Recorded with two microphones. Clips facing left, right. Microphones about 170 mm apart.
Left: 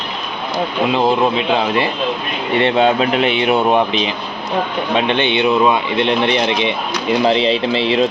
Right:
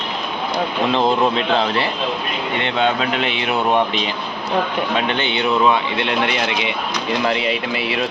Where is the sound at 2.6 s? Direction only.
30° left (ahead or behind).